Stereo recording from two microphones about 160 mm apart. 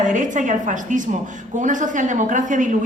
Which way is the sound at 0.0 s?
50° right (ahead or behind).